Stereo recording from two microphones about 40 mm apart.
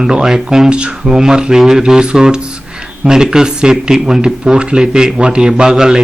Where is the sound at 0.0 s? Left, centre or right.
Centre.